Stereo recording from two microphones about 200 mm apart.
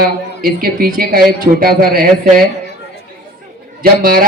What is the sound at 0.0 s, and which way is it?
Speech, 45° right (ahead or behind).